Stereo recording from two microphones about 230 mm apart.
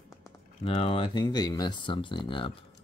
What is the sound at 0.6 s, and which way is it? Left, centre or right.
Speech, left.